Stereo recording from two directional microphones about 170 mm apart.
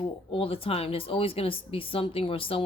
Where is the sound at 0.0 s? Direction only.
30° left (ahead or behind).